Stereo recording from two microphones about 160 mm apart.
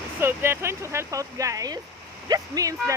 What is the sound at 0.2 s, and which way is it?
Speech, 15° right (ahead or behind).